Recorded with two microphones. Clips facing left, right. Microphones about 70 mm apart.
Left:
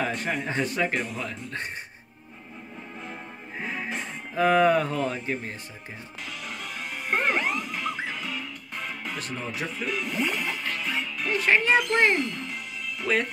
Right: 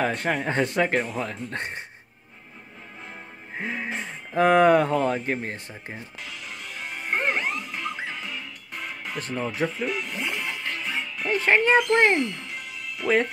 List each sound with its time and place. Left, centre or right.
0.0 s speech: right
3.5 s speech: right
7.1 s music: centre
9.1 s speech: right
10.1 s speech: right